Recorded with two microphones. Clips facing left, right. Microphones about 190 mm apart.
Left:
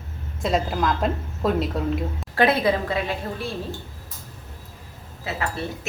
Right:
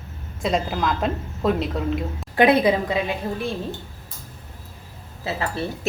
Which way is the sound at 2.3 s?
20° right (ahead or behind).